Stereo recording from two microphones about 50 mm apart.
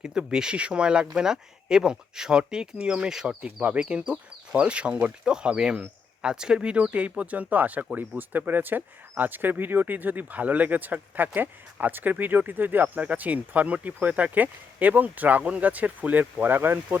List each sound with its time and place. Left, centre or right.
0.0 s speech: centre
3.2 s speech: right